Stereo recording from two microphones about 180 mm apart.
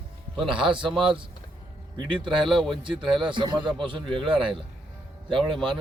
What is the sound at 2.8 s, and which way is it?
A man's voice, 25° right (ahead or behind).